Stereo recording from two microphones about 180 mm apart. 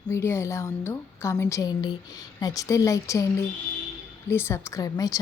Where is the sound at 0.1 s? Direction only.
15° left (ahead or behind).